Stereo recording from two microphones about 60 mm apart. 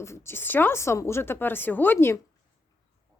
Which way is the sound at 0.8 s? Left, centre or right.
Left.